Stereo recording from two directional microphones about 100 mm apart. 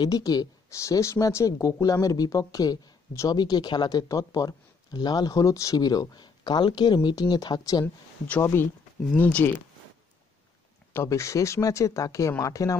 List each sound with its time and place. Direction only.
0.0 s speech: 40° left (ahead or behind)
4.1 s speech: 35° left (ahead or behind)
7.8 s speech: 20° left (ahead or behind)
11.1 s speech: 35° left (ahead or behind)